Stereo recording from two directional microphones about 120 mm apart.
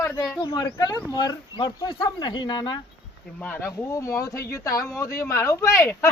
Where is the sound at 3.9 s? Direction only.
25° left (ahead or behind).